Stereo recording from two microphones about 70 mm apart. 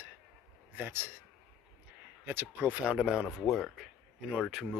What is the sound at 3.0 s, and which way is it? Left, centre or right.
Speech, centre.